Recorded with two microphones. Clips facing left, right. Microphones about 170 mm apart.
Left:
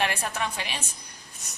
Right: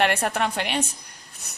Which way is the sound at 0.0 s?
65° right (ahead or behind).